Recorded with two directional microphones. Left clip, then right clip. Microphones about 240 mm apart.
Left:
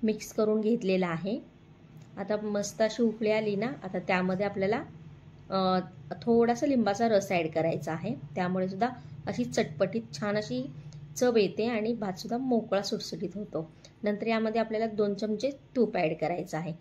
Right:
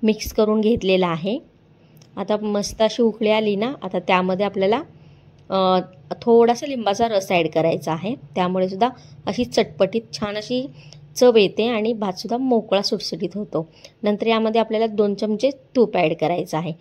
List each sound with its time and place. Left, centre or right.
0.4 s speech: right